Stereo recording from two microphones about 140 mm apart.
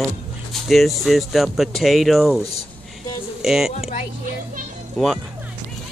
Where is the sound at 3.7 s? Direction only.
50° left (ahead or behind).